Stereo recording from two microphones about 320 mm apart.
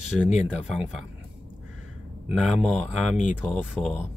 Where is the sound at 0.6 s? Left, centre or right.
Centre.